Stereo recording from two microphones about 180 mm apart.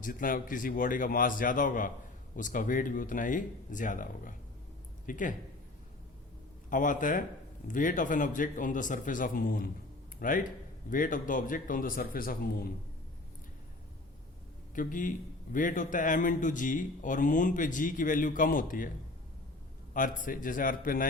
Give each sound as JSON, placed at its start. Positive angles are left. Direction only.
{"t": 0.0, "sound": "a man's voice", "side_deg": 50}
{"t": 6.7, "sound": "a man's voice", "side_deg": 45}
{"t": 14.8, "sound": "a man's voice", "side_deg": 50}
{"t": 19.9, "sound": "a man's voice", "side_deg": 50}